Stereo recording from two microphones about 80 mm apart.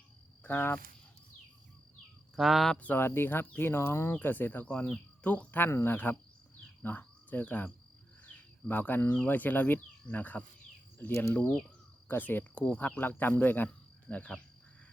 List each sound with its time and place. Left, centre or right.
0.4 s speech: left
2.3 s speech: centre
2.7 s speech: left